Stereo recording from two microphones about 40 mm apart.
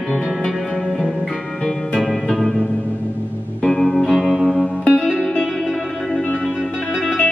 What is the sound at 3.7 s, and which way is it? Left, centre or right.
Music, left.